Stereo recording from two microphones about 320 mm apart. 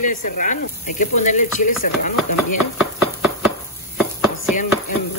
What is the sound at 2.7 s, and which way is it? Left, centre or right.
Chopping, centre.